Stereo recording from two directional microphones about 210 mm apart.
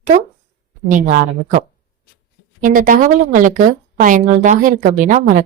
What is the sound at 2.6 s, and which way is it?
A woman's voice, 40° right (ahead or behind).